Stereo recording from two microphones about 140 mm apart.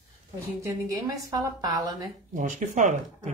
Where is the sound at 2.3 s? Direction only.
65° right (ahead or behind).